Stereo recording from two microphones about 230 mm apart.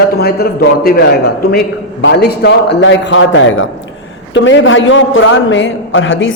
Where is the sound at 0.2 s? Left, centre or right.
Left.